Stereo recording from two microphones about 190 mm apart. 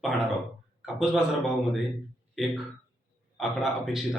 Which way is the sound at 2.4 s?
Centre (ahead or behind).